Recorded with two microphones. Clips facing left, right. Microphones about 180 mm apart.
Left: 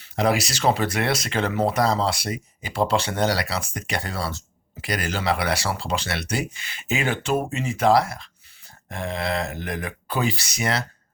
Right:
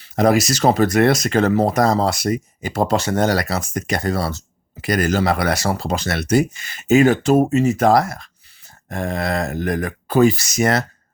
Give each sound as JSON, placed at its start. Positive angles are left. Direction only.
{"t": 0.0, "sound": "speech", "side_deg": -45}